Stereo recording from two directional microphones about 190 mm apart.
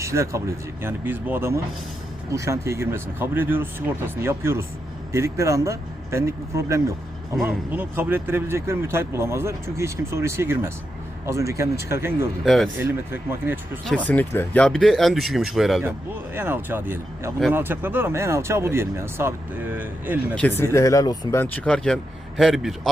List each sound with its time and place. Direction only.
0.0 s speech: 15° right (ahead or behind)
12.5 s speech: centre (ahead or behind)
12.7 s speech: 10° right (ahead or behind)
13.8 s speech: 10° left (ahead or behind)
16.3 s speech: 10° right (ahead or behind)
20.3 s speech: 10° left (ahead or behind)